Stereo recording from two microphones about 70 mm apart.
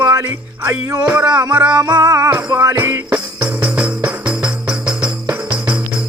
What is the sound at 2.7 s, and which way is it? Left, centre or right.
Speech, right.